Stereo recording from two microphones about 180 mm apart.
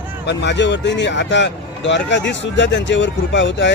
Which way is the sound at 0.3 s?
75° left (ahead or behind).